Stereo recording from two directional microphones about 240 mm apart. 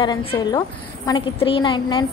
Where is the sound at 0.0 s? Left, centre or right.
Left.